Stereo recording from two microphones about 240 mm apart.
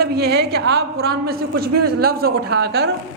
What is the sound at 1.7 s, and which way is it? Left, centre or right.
Speech, right.